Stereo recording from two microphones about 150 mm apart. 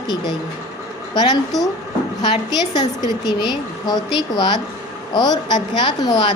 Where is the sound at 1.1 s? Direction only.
25° left (ahead or behind).